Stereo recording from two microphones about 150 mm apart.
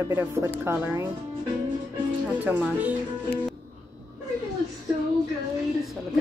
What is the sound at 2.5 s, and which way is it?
Speech, 10° right (ahead or behind).